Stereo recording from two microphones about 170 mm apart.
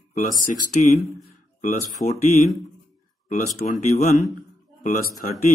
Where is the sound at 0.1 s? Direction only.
45° left (ahead or behind).